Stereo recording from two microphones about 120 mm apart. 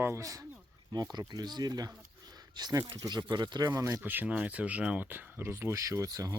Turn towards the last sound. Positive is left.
turn(degrees=-30)  # may be behind; listen again after turning